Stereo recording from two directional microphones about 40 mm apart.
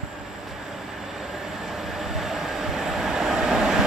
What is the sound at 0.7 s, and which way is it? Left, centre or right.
Train, centre.